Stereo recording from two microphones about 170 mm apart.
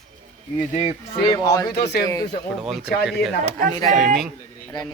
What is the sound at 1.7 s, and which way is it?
Speech, 75° left (ahead or behind).